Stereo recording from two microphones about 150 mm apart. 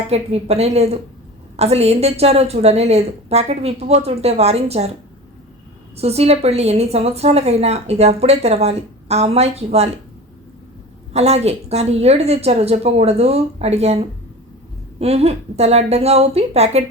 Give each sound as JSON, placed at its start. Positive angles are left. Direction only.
{"t": 0.1, "sound": "a woman's voice", "side_deg": -45}
{"t": 6.0, "sound": "a woman's voice", "side_deg": -45}
{"t": 11.1, "sound": "a woman's voice", "side_deg": -45}